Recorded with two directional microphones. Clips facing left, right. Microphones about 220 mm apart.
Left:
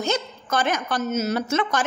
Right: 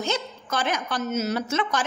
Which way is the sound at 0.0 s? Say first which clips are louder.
Left 3 dB; 45° left (ahead or behind).